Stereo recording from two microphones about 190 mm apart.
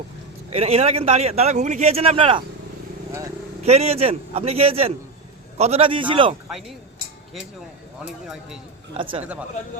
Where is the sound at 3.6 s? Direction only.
35° right (ahead or behind).